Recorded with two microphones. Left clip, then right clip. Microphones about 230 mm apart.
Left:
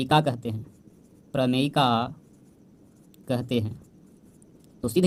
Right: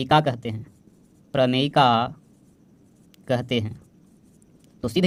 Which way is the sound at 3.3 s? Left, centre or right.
Right.